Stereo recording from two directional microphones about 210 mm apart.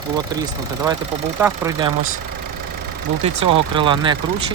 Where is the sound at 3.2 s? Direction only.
25° right (ahead or behind).